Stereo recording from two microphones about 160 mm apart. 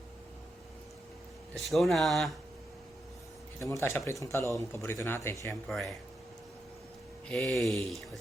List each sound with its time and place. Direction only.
1.5 s speech: centre (ahead or behind)
3.6 s speech: 20° left (ahead or behind)
5.6 s speech: centre (ahead or behind)
7.3 s speech: centre (ahead or behind)